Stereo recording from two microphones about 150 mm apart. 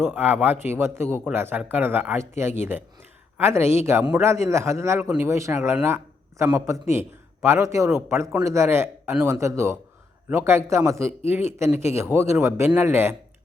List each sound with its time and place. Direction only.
0.0 s a man's voice: 10° right (ahead or behind)